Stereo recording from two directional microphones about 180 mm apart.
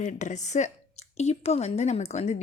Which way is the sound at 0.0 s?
40° left (ahead or behind).